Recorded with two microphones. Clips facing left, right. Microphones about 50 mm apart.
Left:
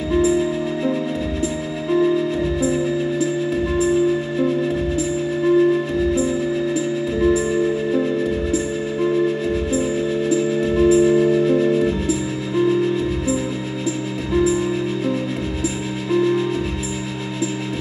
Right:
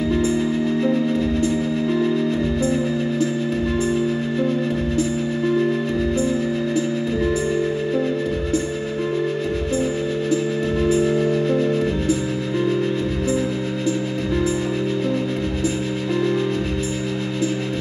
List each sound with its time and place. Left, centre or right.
0.1 s music: centre
2.6 s music: centre
6.1 s music: centre
10.3 s music: centre
16.1 s music: centre